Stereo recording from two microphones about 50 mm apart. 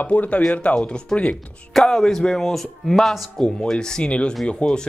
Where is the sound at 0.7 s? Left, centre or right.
Centre.